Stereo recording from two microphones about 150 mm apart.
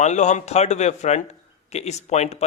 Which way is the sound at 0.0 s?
50° left (ahead or behind).